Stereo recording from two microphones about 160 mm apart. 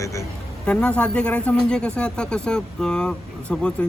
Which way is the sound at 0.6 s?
5° left (ahead or behind).